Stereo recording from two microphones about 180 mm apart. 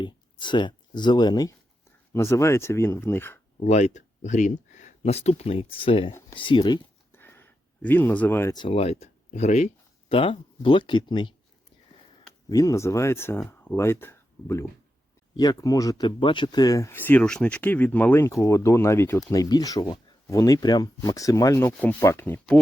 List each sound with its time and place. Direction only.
0.0 s speech: 25° left (ahead or behind)
3.6 s speech: 40° left (ahead or behind)
7.1 s a sound: 10° left (ahead or behind)
8.5 s speech: 30° left (ahead or behind)
12.5 s speech: 20° left (ahead or behind)